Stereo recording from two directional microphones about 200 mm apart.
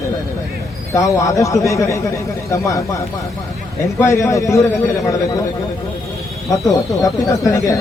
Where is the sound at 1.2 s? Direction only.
15° left (ahead or behind).